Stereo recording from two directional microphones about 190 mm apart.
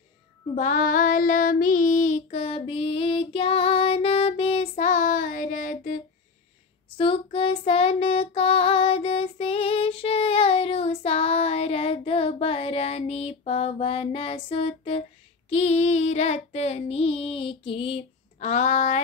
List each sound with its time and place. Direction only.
0.6 s child singing: 45° left (ahead or behind)
7.0 s child singing: 30° left (ahead or behind)